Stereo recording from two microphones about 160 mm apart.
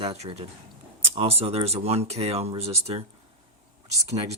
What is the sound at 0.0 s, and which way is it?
Speech, 35° right (ahead or behind).